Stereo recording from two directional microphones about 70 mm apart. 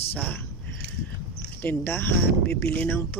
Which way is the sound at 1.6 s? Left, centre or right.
Left.